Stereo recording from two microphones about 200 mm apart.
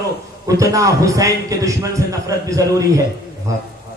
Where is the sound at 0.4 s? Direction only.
15° right (ahead or behind).